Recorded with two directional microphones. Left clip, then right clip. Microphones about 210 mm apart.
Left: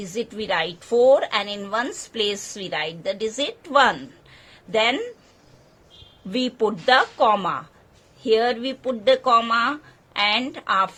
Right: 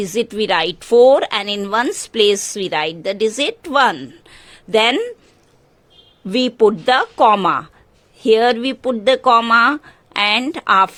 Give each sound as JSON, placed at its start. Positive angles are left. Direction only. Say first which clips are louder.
{"t": 0.0, "sound": "a woman's voice", "louder": "right 10 dB", "side_deg": -55}
{"t": 6.3, "sound": "speech", "louder": "right 9 dB", "side_deg": -55}